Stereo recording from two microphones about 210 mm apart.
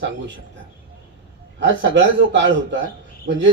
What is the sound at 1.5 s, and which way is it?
Speech, 60° right (ahead or behind).